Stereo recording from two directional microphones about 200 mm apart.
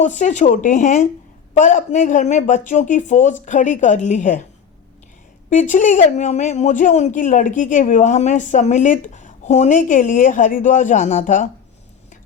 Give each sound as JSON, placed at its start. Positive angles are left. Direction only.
{"t": 0.0, "sound": "speech", "side_deg": 40}
{"t": 5.5, "sound": "speech", "side_deg": 40}